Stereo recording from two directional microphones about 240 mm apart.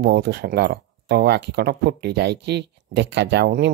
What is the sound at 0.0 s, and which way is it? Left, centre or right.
Speech, right.